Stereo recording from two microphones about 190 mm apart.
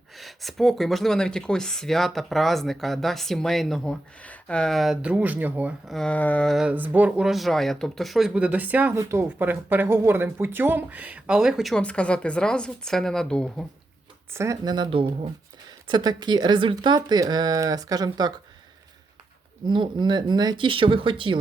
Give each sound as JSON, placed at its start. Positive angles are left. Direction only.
{"t": 0.2, "sound": "speech", "side_deg": 0}
{"t": 6.0, "sound": "speech", "side_deg": 5}
{"t": 14.3, "sound": "speech", "side_deg": -15}
{"t": 19.6, "sound": "speech", "side_deg": -25}